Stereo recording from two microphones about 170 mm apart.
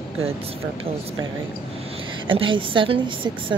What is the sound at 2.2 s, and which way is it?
Speech, 30° right (ahead or behind).